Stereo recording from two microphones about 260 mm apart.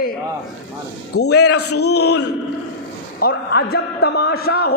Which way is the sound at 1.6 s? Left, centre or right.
Left.